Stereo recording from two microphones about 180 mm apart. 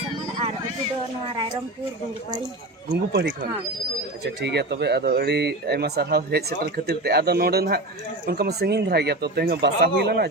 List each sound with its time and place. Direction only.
2.9 s speech: 75° right (ahead or behind)
4.4 s speech: 70° right (ahead or behind)